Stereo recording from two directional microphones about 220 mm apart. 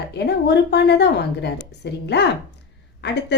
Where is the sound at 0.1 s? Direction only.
50° left (ahead or behind).